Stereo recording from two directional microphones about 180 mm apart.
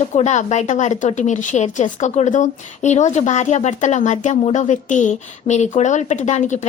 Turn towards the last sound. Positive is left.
turn(degrees=40)  # may be behind; listen again after turning